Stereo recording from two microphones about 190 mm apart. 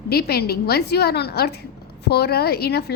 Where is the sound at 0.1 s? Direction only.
55° left (ahead or behind).